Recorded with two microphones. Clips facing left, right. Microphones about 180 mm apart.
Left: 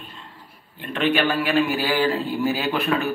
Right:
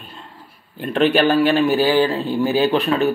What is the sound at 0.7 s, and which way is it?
A man's voice, 35° right (ahead or behind).